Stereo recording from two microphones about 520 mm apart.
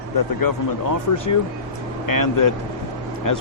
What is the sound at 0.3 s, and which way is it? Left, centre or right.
Speech, left.